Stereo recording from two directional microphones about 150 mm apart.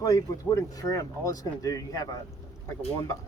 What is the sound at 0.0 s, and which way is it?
Speech, 25° left (ahead or behind).